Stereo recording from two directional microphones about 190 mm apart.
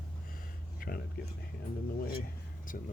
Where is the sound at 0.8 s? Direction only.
50° left (ahead or behind).